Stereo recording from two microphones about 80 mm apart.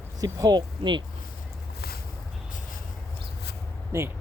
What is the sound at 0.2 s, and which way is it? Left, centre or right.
Speech, right.